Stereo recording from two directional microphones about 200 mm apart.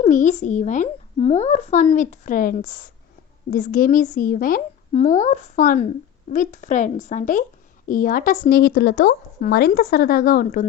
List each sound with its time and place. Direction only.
0.0 s speech: 40° left (ahead or behind)